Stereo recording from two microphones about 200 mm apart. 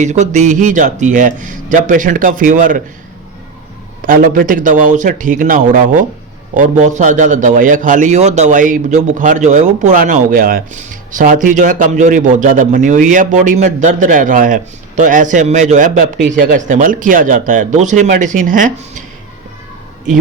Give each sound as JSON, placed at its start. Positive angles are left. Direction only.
{"t": 0.0, "sound": "a man's voice", "side_deg": -35}
{"t": 4.0, "sound": "a man's voice", "side_deg": -45}